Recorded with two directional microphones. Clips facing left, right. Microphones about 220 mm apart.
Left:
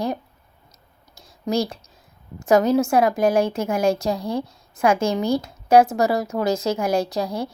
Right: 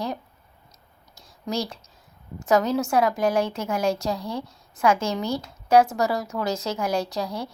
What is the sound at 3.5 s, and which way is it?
Speech, 50° left (ahead or behind).